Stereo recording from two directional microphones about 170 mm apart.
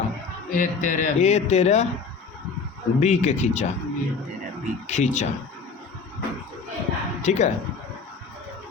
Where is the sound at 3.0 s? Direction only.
40° left (ahead or behind).